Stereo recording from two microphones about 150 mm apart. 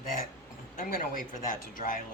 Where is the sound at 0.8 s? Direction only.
65° left (ahead or behind).